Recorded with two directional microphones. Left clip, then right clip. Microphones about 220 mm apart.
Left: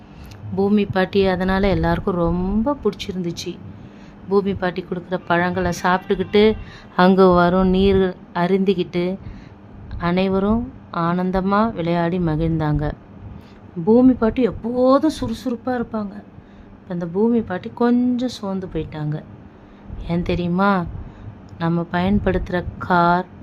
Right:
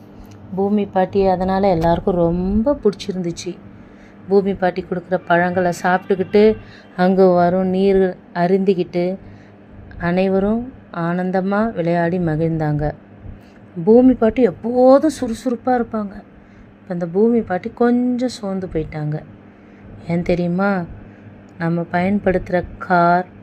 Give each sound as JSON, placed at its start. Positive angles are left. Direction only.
{"t": 0.5, "sound": "a woman's voice", "side_deg": 25}
{"t": 8.6, "sound": "a woman's voice", "side_deg": 45}
{"t": 10.0, "sound": "a woman's voice", "side_deg": 0}
{"t": 13.8, "sound": "speech", "side_deg": 15}
{"t": 14.1, "sound": "a woman's voice", "side_deg": 0}